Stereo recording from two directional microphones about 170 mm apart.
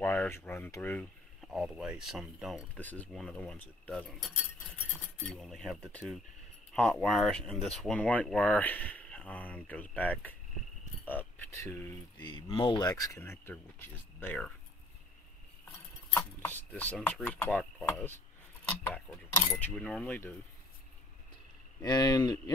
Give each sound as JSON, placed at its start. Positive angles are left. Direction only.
{"t": 0.0, "sound": "speech", "side_deg": 10}
{"t": 1.4, "sound": "speech", "side_deg": 0}
{"t": 2.8, "sound": "speech", "side_deg": 10}
{"t": 5.2, "sound": "speech", "side_deg": 5}
{"t": 16.1, "sound": "speech", "side_deg": 10}
{"t": 21.8, "sound": "speech", "side_deg": 25}